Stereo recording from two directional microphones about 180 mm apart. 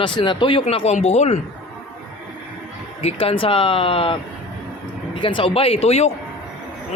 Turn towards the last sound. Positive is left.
turn(degrees=35)  # may be behind; listen again after turning